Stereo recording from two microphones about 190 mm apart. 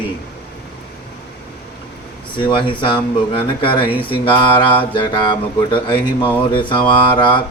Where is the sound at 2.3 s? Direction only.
25° left (ahead or behind).